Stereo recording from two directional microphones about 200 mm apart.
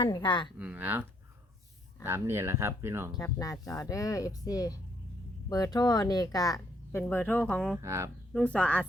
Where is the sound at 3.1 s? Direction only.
15° left (ahead or behind).